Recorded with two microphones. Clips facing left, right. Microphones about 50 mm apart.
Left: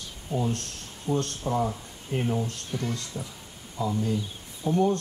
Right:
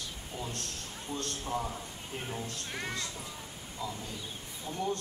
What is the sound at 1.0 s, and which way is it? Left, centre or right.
Speech, left.